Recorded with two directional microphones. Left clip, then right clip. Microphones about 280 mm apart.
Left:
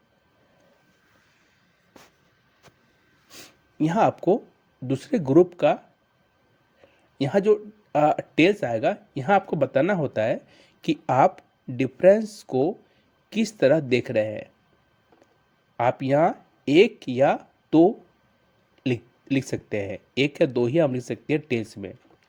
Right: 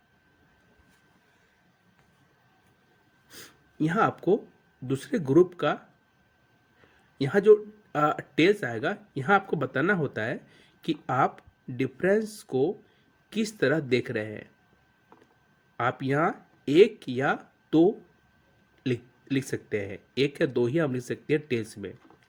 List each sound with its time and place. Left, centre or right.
3.2 s snort: centre
4.9 s speech: centre
7.2 s speech: centre
15.8 s speech: centre